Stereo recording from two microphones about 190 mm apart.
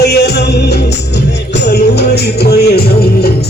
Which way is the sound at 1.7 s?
60° left (ahead or behind).